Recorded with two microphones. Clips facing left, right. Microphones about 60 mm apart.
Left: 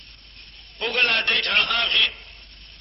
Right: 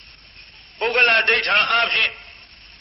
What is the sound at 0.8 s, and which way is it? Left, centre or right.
A man's voice, right.